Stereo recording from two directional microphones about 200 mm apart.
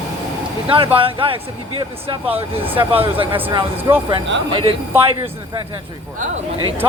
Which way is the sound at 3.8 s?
10° right (ahead or behind).